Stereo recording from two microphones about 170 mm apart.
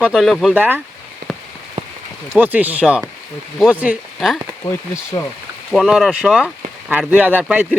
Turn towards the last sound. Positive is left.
turn(degrees=-10)  # may be behind; listen again after turning